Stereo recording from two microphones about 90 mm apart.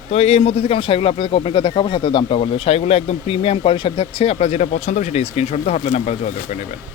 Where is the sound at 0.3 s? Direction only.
90° left.